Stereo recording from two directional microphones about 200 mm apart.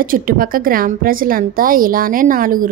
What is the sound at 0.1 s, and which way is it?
A woman's voice, 45° right (ahead or behind).